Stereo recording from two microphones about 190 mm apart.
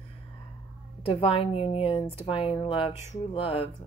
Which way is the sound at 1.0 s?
30° left (ahead or behind).